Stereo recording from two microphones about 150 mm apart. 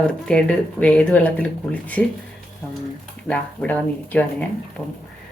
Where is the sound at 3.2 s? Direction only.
10° left (ahead or behind).